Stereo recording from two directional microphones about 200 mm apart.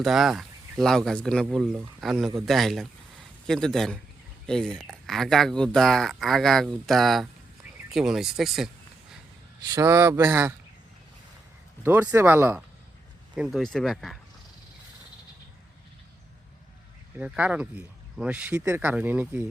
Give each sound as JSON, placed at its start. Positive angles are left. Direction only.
{"t": 0.0, "sound": "speech", "side_deg": 0}
{"t": 9.7, "sound": "speech", "side_deg": -15}
{"t": 11.8, "sound": "speech", "side_deg": -10}
{"t": 17.2, "sound": "speech", "side_deg": -5}